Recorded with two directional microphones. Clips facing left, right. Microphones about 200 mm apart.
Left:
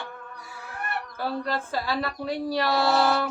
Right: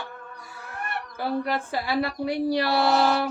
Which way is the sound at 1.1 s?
15° right (ahead or behind).